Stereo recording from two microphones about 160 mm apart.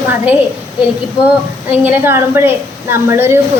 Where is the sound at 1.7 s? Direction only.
10° right (ahead or behind).